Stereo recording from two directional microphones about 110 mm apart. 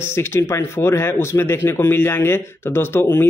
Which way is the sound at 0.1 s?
20° left (ahead or behind).